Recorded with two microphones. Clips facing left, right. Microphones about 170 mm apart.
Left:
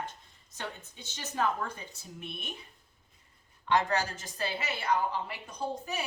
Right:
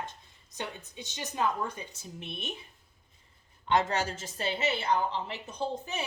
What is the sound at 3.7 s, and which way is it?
A woman's voice, 25° right (ahead or behind).